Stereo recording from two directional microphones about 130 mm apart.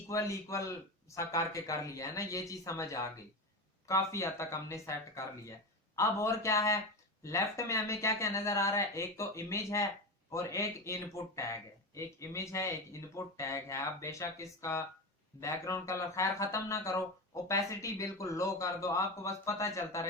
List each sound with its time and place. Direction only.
0.1 s speech: 25° left (ahead or behind)